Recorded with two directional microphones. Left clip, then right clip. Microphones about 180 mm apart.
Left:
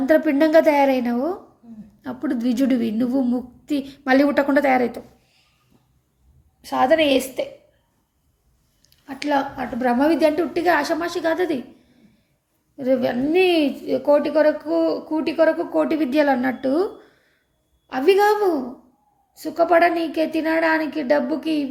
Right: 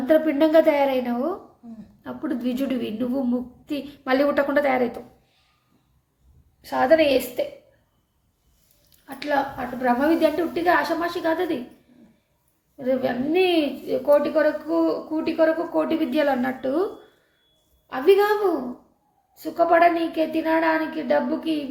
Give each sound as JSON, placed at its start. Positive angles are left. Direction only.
{"t": 0.1, "sound": "a woman's voice", "side_deg": 25}
{"t": 6.6, "sound": "a woman's voice", "side_deg": 15}
{"t": 8.9, "sound": "a woman's voice", "side_deg": 25}
{"t": 12.7, "sound": "a woman's voice", "side_deg": 30}